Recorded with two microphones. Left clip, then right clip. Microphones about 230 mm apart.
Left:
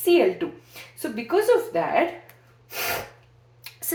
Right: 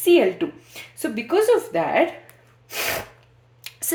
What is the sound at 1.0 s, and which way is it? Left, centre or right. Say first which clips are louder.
A woman's voice: right 3 dB; right.